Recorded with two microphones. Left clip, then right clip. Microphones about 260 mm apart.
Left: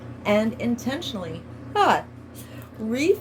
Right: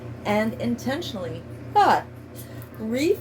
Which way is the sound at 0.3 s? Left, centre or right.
Left.